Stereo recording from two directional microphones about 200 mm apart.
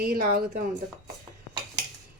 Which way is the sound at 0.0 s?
45° right (ahead or behind).